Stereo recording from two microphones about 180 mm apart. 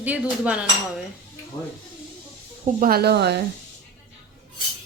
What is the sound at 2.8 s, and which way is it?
Speech, 55° right (ahead or behind).